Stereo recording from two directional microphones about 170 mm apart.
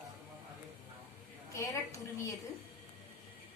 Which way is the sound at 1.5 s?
15° left (ahead or behind).